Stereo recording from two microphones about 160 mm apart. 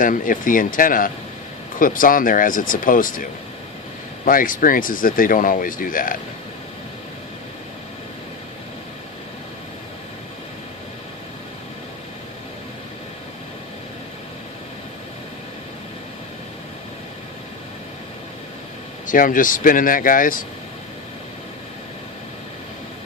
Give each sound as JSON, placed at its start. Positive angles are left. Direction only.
{"t": 0.0, "sound": "speech", "side_deg": 55}
{"t": 4.3, "sound": "speech", "side_deg": 60}
{"t": 19.0, "sound": "speech", "side_deg": 55}